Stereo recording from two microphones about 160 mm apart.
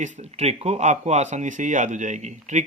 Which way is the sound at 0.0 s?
40° right (ahead or behind).